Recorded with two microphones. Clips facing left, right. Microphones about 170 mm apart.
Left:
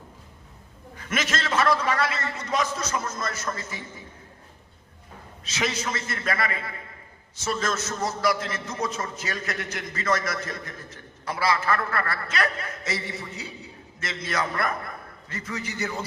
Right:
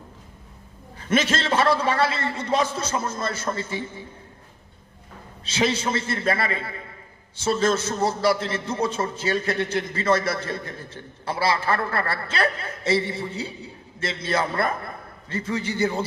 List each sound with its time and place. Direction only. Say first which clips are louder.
0.9 s a man's voice: right 6 dB; 30° right (ahead or behind)
5.5 s a man's voice: right 5 dB; 30° right (ahead or behind)